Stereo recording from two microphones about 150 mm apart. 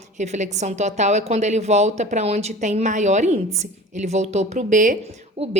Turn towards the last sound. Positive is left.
turn(degrees=-45)  # may be behind; listen again after turning